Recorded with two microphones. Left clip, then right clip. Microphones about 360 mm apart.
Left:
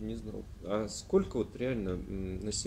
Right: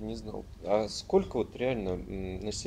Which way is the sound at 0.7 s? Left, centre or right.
Centre.